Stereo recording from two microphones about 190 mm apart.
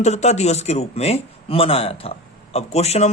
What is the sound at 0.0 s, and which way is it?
Speech, 35° left (ahead or behind).